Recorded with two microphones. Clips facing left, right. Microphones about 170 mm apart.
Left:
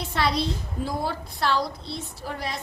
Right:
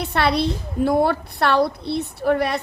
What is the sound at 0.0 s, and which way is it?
A woman's voice, 65° right (ahead or behind).